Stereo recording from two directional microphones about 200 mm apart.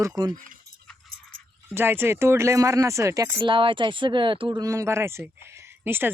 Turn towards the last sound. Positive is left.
turn(degrees=-10)  # may be behind; listen again after turning